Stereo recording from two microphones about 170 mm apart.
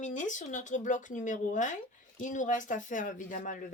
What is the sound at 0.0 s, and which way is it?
Speech, 45° left (ahead or behind).